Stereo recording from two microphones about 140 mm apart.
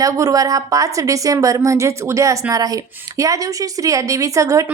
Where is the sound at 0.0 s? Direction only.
25° right (ahead or behind).